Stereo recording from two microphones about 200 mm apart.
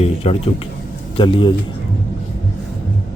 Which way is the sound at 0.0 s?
30° left (ahead or behind).